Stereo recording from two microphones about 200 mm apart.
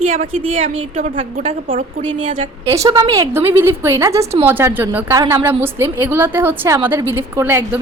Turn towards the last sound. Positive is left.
turn(degrees=-10)  # may be behind; listen again after turning